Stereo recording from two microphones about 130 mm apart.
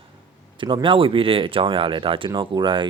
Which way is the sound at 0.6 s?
40° right (ahead or behind).